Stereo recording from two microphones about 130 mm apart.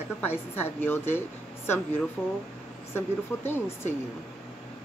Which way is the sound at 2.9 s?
15° left (ahead or behind).